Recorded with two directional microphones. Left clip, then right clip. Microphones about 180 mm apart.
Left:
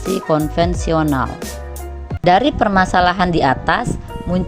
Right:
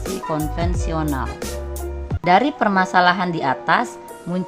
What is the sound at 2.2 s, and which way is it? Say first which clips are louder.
Speech: left 3 dB; 30° left (ahead or behind).